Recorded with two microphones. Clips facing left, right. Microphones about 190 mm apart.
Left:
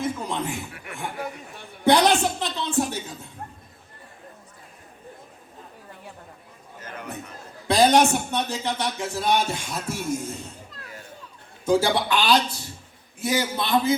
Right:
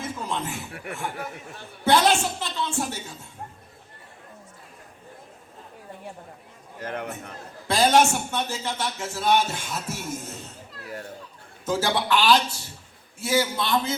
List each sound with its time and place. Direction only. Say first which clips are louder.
0.0 s speech: left 3 dB; 15° left (ahead or behind)
1.8 s speech: left 2 dB; 15° left (ahead or behind)
6.7 s a man's voice: right 7 dB; 60° right (ahead or behind)
7.7 s speech: left 2 dB; 15° left (ahead or behind)
11.6 s speech: left 4 dB; 15° left (ahead or behind)